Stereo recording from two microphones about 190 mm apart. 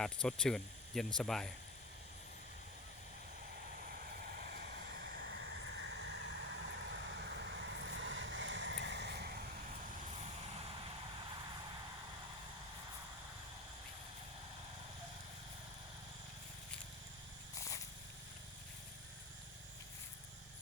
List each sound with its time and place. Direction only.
0.0 s speech: 5° left (ahead or behind)
4.1 s vehicle: 50° right (ahead or behind)